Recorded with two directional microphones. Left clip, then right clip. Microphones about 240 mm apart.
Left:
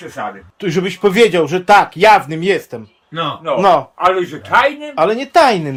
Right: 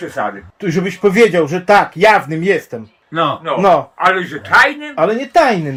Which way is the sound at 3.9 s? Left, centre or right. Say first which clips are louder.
Even; left.